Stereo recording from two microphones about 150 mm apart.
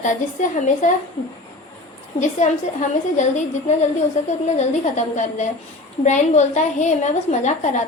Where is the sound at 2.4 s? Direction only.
55° left (ahead or behind).